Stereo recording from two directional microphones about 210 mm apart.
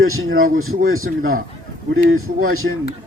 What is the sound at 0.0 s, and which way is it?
Speech, 80° right.